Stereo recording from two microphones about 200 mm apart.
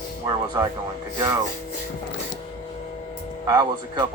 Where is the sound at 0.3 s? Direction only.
20° right (ahead or behind).